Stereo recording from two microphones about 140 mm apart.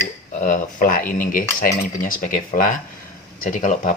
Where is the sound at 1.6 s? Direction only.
80° left.